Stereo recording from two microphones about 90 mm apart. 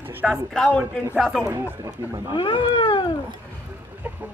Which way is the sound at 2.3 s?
65° left (ahead or behind).